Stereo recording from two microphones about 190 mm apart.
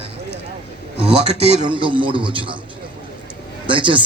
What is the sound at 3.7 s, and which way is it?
Speech, 25° right (ahead or behind).